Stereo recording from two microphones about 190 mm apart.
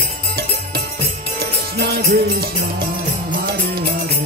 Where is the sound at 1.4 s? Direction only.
55° right (ahead or behind).